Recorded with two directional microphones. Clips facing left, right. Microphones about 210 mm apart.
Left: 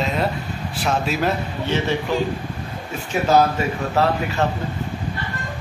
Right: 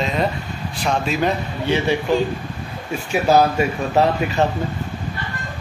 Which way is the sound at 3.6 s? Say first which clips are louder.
Right 3 dB; 15° right (ahead or behind).